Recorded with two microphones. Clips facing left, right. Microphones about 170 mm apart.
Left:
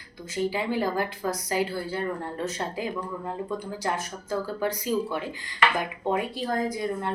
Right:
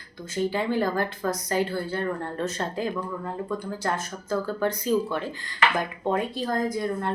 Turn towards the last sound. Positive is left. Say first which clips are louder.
# right 1 dB
turn(degrees=15)  # may be behind; listen again after turning